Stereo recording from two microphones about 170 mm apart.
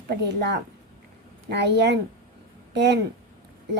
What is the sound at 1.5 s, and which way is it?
A woman's voice, 80° right.